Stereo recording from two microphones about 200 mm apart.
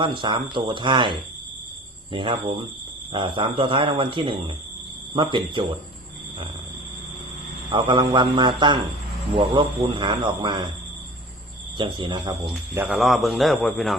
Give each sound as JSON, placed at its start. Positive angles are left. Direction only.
{"t": 0.0, "sound": "speech", "side_deg": -25}
{"t": 7.7, "sound": "speech", "side_deg": -25}
{"t": 11.8, "sound": "speech", "side_deg": -25}
{"t": 12.7, "sound": "a man's voice", "side_deg": -5}